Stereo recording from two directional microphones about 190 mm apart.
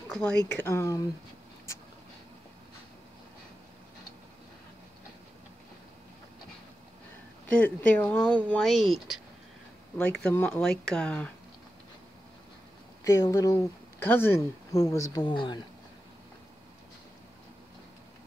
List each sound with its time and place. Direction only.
0.1 s speech: 5° left (ahead or behind)
0.7 s speech: 15° left (ahead or behind)
7.4 s speech: 5° left (ahead or behind)
13.0 s speech: 15° left (ahead or behind)